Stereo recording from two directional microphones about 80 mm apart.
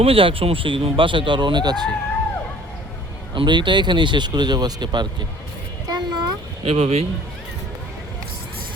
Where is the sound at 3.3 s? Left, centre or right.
Right.